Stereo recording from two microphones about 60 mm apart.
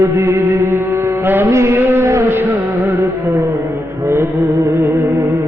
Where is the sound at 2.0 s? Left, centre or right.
Right.